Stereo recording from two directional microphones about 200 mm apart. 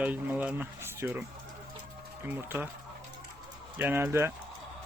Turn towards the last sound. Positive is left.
turn(degrees=-10)  # may be behind; listen again after turning